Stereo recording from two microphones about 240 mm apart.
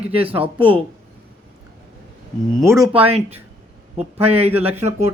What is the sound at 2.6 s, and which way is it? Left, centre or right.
Speech, centre.